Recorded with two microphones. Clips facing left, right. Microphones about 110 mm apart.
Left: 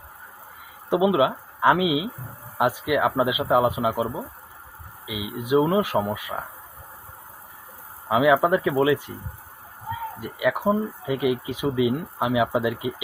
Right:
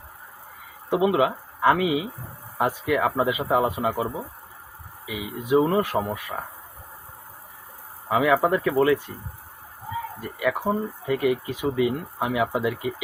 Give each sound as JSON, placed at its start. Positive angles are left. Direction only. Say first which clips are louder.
{"t": 0.9, "sound": "speech", "louder": "left 1 dB", "side_deg": 15}
{"t": 8.0, "sound": "speech", "louder": "left 2 dB", "side_deg": 15}
{"t": 10.2, "sound": "speech", "louder": "left 2 dB", "side_deg": 15}